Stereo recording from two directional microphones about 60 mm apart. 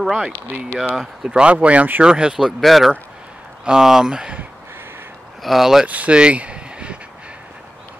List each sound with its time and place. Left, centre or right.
0.0 s speech: centre
1.4 s speech: right
2.3 s speech: centre
5.4 s speech: centre
5.9 s speech: right